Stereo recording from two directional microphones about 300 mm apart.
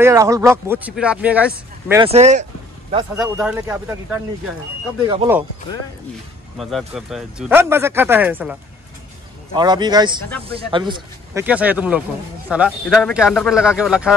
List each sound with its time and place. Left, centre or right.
0.0 s speech: centre
2.0 s speech: right
3.2 s speech: centre
6.6 s speech: centre